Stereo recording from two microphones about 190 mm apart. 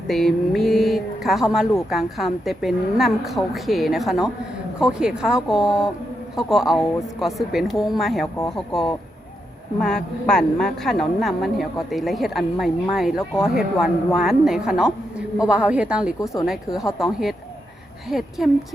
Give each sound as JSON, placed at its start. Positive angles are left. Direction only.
{"t": 0.1, "sound": "a woman's voice", "side_deg": 0}
{"t": 16.2, "sound": "speech", "side_deg": 15}
{"t": 16.5, "sound": "a woman's voice", "side_deg": 0}